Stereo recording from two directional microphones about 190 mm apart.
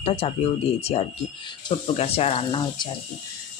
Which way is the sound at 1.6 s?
30° left (ahead or behind).